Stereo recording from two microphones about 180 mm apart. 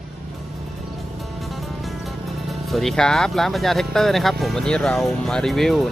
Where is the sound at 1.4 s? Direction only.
Centre (ahead or behind).